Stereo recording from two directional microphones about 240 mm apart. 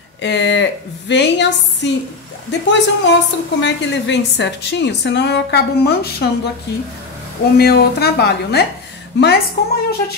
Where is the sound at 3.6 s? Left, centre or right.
Left.